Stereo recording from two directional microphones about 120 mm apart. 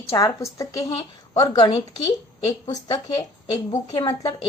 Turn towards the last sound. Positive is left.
turn(degrees=40)  # may be behind; listen again after turning